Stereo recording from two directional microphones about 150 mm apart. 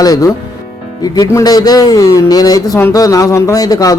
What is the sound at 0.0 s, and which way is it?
A man's voice, 25° left (ahead or behind).